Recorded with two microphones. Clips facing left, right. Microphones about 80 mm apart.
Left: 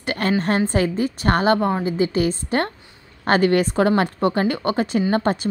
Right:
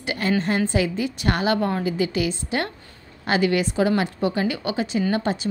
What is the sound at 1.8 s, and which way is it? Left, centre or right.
A woman's voice, left.